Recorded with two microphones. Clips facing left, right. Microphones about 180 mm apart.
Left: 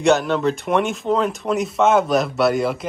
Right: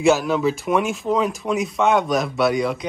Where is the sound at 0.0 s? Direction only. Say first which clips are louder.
Even; centre (ahead or behind).